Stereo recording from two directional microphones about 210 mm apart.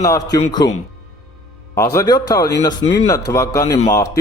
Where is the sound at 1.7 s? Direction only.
15° left (ahead or behind).